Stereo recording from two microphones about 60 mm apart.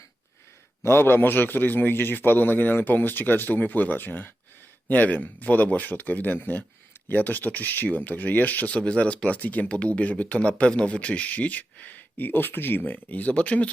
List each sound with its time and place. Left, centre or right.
0.8 s a man's voice: left